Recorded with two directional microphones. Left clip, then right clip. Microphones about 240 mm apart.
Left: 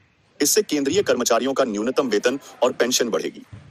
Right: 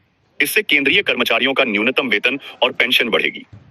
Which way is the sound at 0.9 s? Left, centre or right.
Centre.